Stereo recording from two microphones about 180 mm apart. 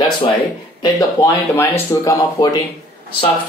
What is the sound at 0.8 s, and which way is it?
Speech, 20° left (ahead or behind).